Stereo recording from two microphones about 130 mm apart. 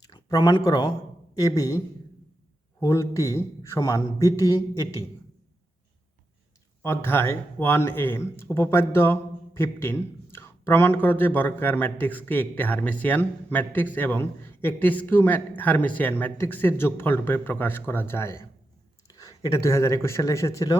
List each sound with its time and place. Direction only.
0.1 s speech: 30° left (ahead or behind)
2.8 s speech: 25° left (ahead or behind)
6.8 s a man's voice: 15° left (ahead or behind)